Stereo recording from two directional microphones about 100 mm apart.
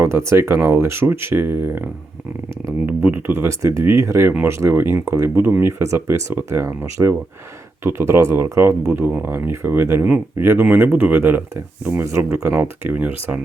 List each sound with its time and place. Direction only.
0.0 s speech: 25° right (ahead or behind)